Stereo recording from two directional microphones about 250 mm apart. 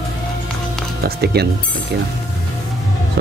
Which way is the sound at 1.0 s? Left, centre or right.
Right.